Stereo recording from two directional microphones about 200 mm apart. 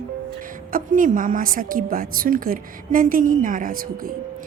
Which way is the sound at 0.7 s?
40° right (ahead or behind).